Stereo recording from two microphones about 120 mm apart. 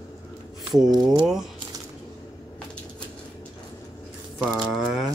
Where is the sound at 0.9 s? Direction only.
35° right (ahead or behind).